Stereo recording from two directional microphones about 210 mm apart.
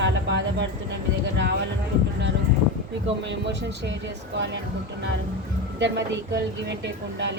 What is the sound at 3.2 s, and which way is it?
Speech, 55° right (ahead or behind).